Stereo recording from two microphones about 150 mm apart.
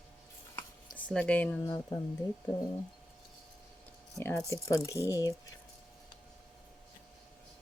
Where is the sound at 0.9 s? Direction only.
10° left (ahead or behind).